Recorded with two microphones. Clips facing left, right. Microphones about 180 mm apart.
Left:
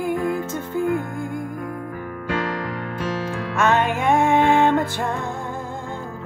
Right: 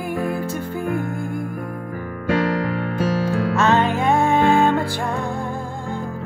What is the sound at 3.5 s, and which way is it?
Music, 15° left (ahead or behind).